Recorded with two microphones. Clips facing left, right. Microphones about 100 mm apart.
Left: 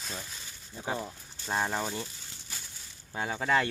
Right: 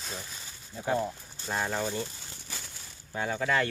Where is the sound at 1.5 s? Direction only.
15° left (ahead or behind).